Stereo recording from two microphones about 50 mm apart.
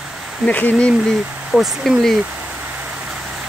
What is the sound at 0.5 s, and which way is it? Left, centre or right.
Speech, left.